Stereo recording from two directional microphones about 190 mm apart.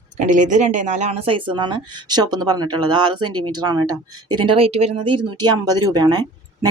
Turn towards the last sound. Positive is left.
turn(degrees=-20)  # may be behind; listen again after turning